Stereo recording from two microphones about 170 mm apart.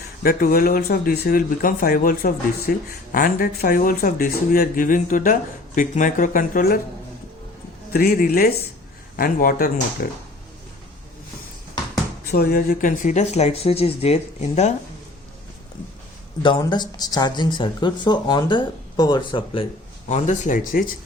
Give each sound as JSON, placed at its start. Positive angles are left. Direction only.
{"t": 0.2, "sound": "speech", "side_deg": 55}
{"t": 7.9, "sound": "speech", "side_deg": 60}
{"t": 12.3, "sound": "speech", "side_deg": 60}
{"t": 16.4, "sound": "speech", "side_deg": 25}
{"t": 20.1, "sound": "speech", "side_deg": 45}